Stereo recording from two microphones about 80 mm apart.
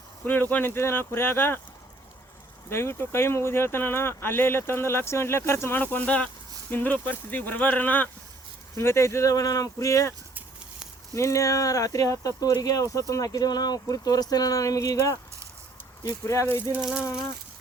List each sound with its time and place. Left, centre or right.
0.5 s speech: left
2.6 s speech: left
8.7 s speech: left
16.2 s speech: left